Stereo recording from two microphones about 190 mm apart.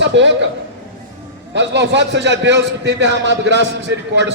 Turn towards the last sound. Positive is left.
turn(degrees=-65)  # may be behind; listen again after turning